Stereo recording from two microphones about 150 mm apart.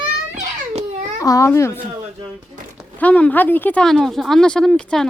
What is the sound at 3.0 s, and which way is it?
Speech, 10° left (ahead or behind).